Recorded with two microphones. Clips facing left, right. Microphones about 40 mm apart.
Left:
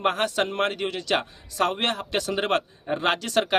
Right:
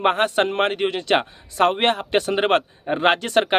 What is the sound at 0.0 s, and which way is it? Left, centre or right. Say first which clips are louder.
A man's voice: right 5 dB; right.